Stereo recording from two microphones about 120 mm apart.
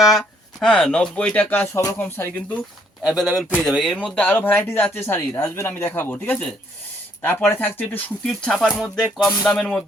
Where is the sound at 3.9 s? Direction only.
10° left (ahead or behind).